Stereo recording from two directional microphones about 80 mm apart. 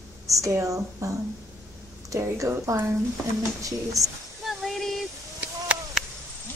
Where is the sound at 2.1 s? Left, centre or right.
Right.